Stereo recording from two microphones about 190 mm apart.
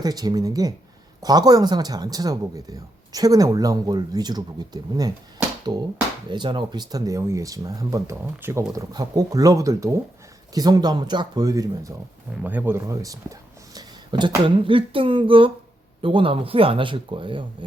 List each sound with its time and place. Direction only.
0.0 s speech: 20° right (ahead or behind)